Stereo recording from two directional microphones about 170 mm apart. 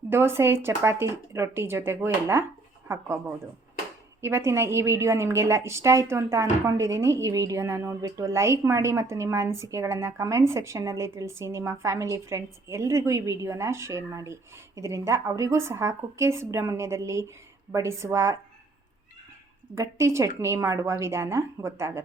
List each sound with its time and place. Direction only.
0.1 s a woman's voice: 15° right (ahead or behind)
19.7 s a woman's voice: 15° right (ahead or behind)